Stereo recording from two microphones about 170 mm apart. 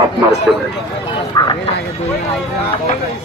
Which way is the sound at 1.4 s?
25° left (ahead or behind).